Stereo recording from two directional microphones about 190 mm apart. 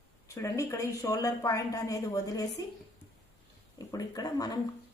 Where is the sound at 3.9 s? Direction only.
20° left (ahead or behind).